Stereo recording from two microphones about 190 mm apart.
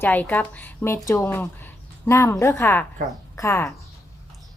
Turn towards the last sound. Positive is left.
turn(degrees=15)  # may be behind; listen again after turning